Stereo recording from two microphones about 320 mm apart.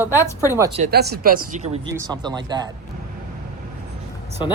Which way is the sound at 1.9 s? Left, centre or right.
Centre.